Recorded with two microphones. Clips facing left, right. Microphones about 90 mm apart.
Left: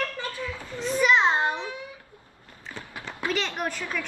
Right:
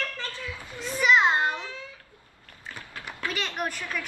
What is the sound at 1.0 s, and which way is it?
Speech, 5° right (ahead or behind).